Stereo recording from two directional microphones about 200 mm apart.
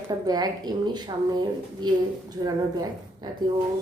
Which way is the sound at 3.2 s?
20° right (ahead or behind).